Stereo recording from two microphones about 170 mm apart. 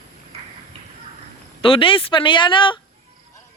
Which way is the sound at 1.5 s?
30° left (ahead or behind).